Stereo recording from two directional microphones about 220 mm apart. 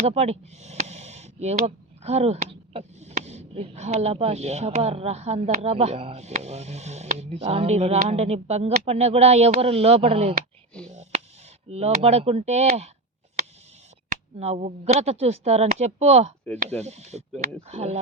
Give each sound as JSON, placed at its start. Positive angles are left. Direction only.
{"t": 0.0, "sound": "speech", "side_deg": -30}
{"t": 11.7, "sound": "speech", "side_deg": -30}
{"t": 14.3, "sound": "speech", "side_deg": -30}